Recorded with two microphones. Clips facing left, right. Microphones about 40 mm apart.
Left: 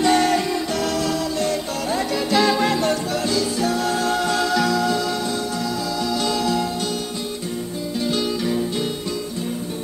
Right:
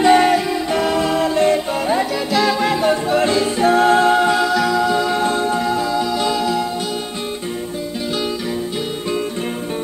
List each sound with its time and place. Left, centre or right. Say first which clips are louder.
0.0 s music: right 5 dB; centre
2.3 s music: right 1 dB; centre
2.9 s music: right 6 dB; right
4.4 s music: right 3 dB; centre
4.9 s music: right 5 dB; right
5.2 s music: right 7 dB; right
5.9 s music: right 4 dB; centre